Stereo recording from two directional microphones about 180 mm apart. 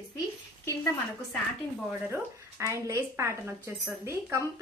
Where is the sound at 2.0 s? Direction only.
15° right (ahead or behind).